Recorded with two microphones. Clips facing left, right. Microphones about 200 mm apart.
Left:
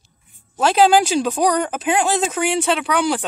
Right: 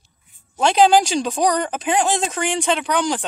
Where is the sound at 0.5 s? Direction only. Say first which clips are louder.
Even; 5° left (ahead or behind).